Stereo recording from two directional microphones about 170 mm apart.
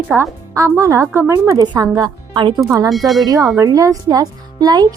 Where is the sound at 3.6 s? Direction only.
20° right (ahead or behind).